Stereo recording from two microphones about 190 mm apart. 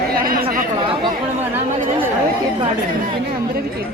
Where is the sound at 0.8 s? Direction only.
25° right (ahead or behind).